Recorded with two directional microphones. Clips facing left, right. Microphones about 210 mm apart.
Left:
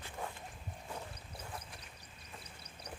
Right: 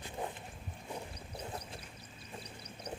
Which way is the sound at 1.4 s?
30° right (ahead or behind).